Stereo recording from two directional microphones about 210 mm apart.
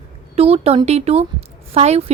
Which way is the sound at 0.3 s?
30° right (ahead or behind).